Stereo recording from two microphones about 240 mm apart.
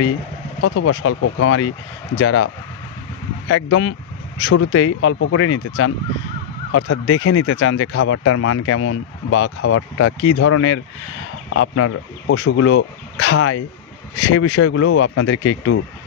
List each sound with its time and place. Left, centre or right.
0.6 s speech: left